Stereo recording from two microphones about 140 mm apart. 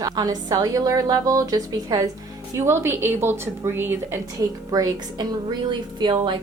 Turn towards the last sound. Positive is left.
turn(degrees=-35)  # may be behind; listen again after turning